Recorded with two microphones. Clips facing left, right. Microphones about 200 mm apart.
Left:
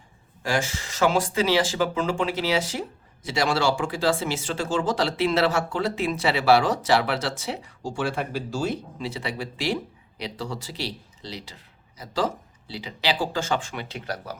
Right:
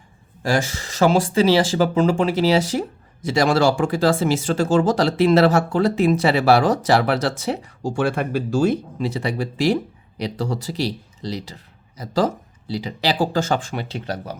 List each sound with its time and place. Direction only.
0.4 s speech: 35° right (ahead or behind)